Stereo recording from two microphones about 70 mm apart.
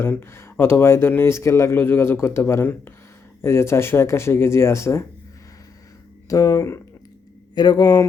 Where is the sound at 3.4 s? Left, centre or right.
Left.